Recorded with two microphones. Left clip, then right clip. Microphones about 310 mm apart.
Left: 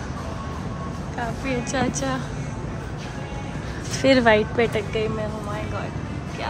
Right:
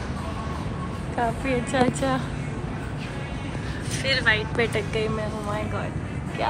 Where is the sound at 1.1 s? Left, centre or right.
Centre.